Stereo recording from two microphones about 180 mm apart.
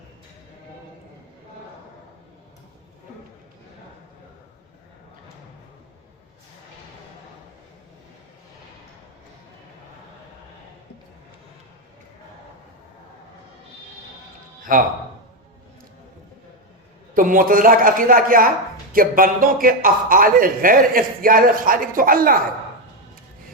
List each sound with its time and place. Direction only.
14.7 s speech: 50° right (ahead or behind)
17.2 s speech: 50° right (ahead or behind)